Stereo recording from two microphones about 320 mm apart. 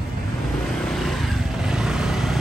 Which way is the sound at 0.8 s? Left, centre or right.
Centre.